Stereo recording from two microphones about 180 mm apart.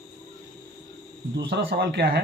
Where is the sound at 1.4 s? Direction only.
70° right (ahead or behind).